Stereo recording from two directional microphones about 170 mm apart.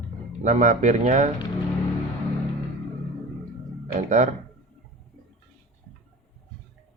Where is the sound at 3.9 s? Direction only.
45° right (ahead or behind).